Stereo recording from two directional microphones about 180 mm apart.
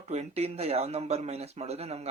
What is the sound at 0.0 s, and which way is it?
Speech, 35° right (ahead or behind).